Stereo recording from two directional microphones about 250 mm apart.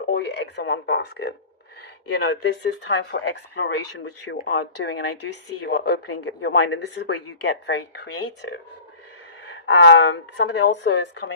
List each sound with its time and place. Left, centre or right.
0.1 s a woman's voice: left
9.6 s a woman's voice: left